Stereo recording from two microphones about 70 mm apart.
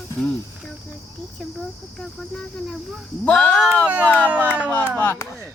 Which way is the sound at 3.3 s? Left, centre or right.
Centre.